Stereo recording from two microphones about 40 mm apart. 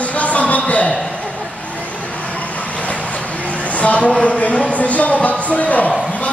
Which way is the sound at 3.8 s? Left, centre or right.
Left.